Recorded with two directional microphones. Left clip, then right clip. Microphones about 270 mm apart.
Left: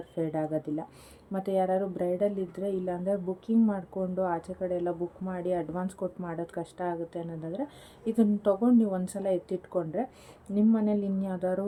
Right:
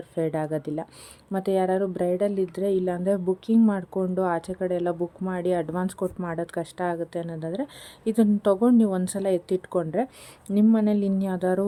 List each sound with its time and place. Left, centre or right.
0.2 s a woman's voice: right